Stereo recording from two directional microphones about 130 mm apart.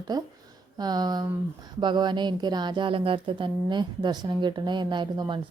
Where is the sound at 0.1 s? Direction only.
30° right (ahead or behind).